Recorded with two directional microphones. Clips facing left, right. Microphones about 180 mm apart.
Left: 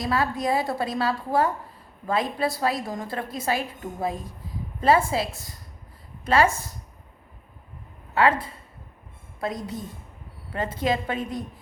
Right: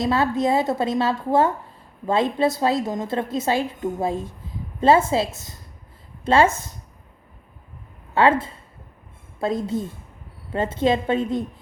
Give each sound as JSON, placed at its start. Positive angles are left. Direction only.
{"t": 0.0, "sound": "a woman's voice", "side_deg": -25}
{"t": 8.1, "sound": "a woman's voice", "side_deg": -25}